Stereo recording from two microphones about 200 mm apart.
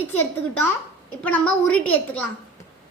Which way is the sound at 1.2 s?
5° left (ahead or behind).